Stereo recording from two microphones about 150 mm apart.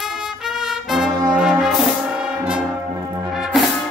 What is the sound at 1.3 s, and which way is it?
Brass instrument, 5° right (ahead or behind).